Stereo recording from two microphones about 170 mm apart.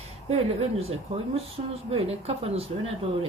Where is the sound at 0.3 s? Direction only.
35° right (ahead or behind).